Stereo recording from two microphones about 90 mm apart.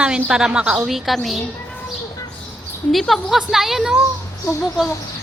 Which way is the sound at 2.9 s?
Centre (ahead or behind).